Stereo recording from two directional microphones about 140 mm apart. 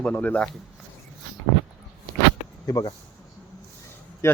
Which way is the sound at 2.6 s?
25° left (ahead or behind).